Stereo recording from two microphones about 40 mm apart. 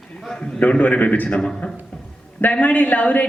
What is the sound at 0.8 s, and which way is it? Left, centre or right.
Speech, left.